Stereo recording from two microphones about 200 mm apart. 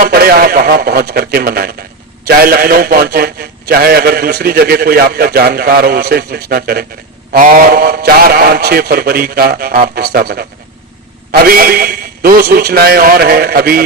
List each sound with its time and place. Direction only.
0.0 s a man's voice: 50° right (ahead or behind)